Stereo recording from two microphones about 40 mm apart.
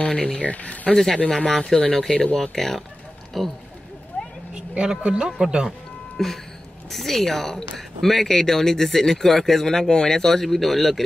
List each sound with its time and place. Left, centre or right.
0.0 s a sound: left
0.4 s speech: left
0.9 s speech: centre
4.1 s a sound: left
4.6 s a man's voice: right
6.1 s speech: centre